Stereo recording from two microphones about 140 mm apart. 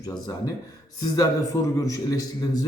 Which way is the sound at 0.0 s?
25° left (ahead or behind).